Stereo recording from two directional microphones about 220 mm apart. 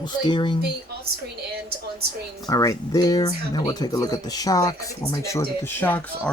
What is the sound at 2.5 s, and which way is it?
Speech, 15° left (ahead or behind).